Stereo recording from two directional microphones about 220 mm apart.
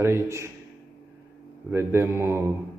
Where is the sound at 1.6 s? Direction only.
10° right (ahead or behind).